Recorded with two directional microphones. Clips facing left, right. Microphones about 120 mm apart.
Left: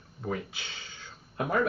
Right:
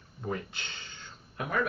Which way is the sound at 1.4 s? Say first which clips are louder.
Left 3 dB; 30° left (ahead or behind).